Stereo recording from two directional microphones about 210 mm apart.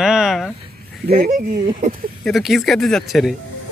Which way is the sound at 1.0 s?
45° right (ahead or behind).